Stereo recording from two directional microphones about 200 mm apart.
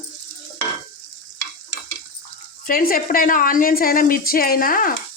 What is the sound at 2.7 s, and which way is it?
Speech, 45° left (ahead or behind).